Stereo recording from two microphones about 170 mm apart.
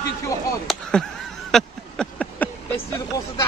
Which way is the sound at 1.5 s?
5° left (ahead or behind).